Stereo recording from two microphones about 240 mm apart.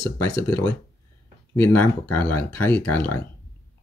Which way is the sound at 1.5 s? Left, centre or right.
Centre.